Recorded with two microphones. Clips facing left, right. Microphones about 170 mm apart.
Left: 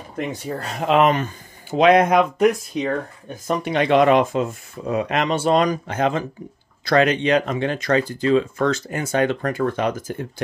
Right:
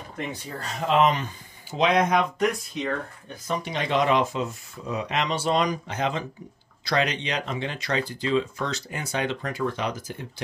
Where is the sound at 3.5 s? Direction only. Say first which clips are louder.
Left 8 dB; 60° left (ahead or behind).